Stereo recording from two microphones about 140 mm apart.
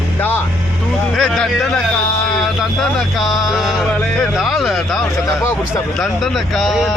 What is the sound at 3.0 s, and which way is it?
Speech, centre (ahead or behind).